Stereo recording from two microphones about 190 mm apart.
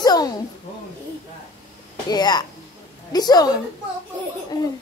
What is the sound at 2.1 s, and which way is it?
A child's voice, 20° left (ahead or behind).